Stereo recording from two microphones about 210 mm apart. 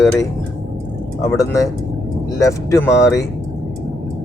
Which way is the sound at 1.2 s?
15° left (ahead or behind).